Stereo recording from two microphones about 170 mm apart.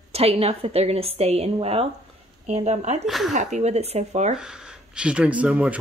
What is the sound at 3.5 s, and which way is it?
Speech, 40° right (ahead or behind).